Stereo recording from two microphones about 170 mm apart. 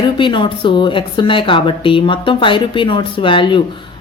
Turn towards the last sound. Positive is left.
turn(degrees=30)  # may be behind; listen again after turning